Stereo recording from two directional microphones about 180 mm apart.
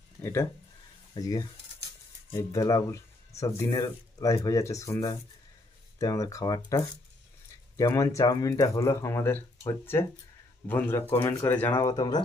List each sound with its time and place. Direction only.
0.2 s speech: 15° left (ahead or behind)
11.8 s speech: 20° left (ahead or behind)